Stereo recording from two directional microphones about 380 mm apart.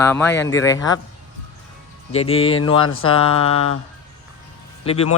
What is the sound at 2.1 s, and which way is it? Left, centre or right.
Speech, centre.